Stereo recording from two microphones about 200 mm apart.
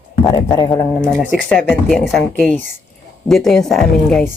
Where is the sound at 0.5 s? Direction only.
20° left (ahead or behind).